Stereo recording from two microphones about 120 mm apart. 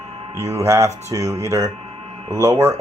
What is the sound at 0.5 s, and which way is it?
Speech, 25° right (ahead or behind).